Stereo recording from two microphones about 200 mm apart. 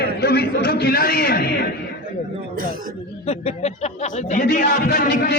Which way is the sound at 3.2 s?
30° left (ahead or behind).